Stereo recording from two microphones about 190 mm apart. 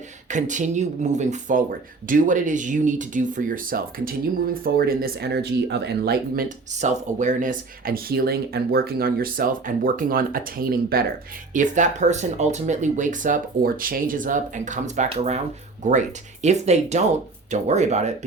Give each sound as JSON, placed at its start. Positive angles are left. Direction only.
{"t": 0.3, "sound": "speech", "side_deg": -40}
{"t": 11.5, "sound": "speech", "side_deg": -40}